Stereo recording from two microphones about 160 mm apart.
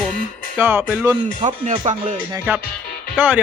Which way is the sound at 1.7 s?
30° right (ahead or behind).